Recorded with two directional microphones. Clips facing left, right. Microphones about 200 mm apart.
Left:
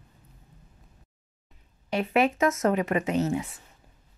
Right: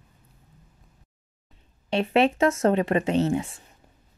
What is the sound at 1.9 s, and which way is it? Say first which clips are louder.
Speech: right 3 dB; 30° right (ahead or behind).